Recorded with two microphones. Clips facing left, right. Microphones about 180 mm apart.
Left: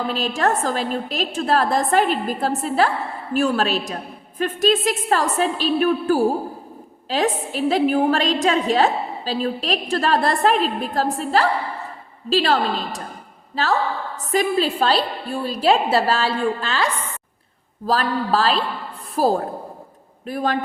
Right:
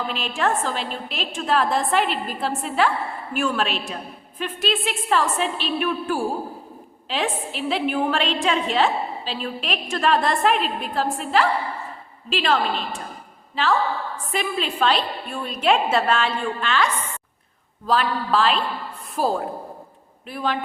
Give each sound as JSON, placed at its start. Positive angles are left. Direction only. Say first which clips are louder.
{"t": 0.1, "sound": "a woman's voice", "louder": "left 3 dB", "side_deg": 40}